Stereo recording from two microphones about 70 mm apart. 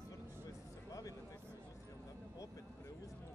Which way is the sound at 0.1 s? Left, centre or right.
Left.